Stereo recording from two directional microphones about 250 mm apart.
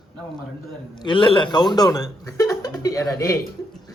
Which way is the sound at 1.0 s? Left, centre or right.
Centre.